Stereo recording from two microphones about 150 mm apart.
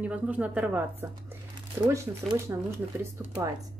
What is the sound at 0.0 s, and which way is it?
Speech, 10° right (ahead or behind).